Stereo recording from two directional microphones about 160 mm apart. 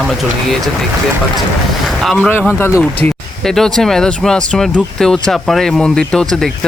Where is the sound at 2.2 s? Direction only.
15° left (ahead or behind).